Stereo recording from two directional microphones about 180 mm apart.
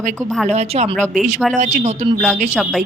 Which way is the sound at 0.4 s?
35° right (ahead or behind).